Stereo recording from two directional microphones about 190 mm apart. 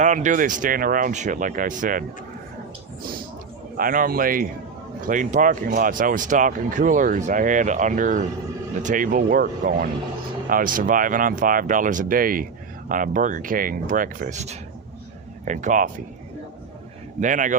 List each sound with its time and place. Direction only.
0.0 s speech: 40° right (ahead or behind)
3.8 s speech: 50° right (ahead or behind)
17.2 s speech: 40° right (ahead or behind)